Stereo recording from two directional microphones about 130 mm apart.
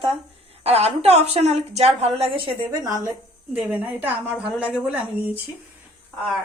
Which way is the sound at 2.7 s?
30° right (ahead or behind).